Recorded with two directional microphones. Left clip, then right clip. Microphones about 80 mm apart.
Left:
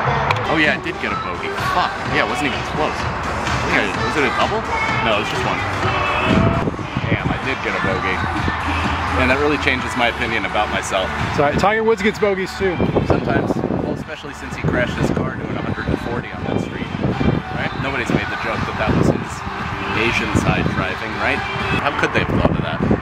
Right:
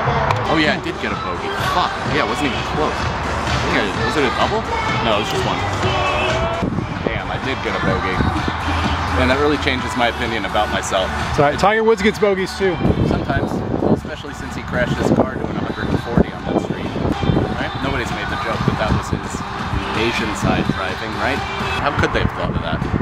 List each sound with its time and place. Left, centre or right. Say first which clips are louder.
0.5 s speech: left 1 dB; centre
9.2 s speech: even; centre
20.0 s speech: left 1 dB; centre
21.8 s speech: right 1 dB; centre